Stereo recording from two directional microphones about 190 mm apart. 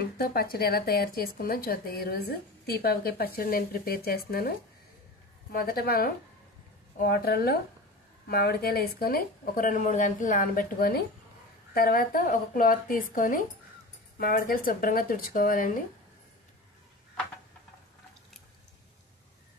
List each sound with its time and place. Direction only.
0.2 s a woman's voice: 55° left (ahead or behind)